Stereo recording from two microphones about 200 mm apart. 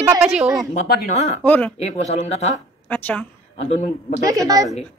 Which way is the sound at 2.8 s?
10° left (ahead or behind).